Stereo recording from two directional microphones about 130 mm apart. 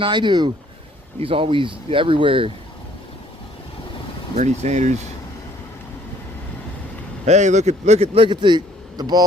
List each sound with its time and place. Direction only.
0.0 s speech: 35° right (ahead or behind)
4.4 s speech: 60° right (ahead or behind)
7.3 s a man's voice: 65° right (ahead or behind); by 9.2 s 30° right (ahead or behind)